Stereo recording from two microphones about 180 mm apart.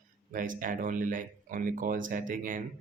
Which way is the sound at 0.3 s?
50° right (ahead or behind).